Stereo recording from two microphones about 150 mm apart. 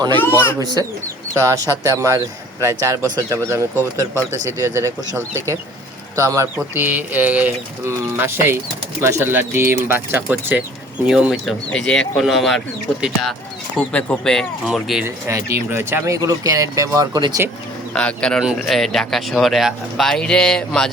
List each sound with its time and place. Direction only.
0.1 s speech: 15° left (ahead or behind)
0.6 s speech: 25° right (ahead or behind); by 15.0 s centre (ahead or behind)
15.0 s speech: 20° right (ahead or behind)
17.9 s speech: 5° left (ahead or behind)